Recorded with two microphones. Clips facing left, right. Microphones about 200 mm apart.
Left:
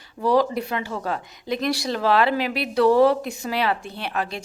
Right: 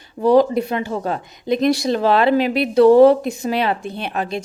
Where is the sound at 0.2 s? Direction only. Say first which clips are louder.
Right 6 dB; 20° right (ahead or behind).